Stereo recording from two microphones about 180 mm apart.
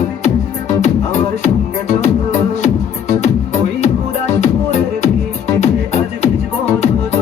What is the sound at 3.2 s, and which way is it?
Music, 40° left (ahead or behind).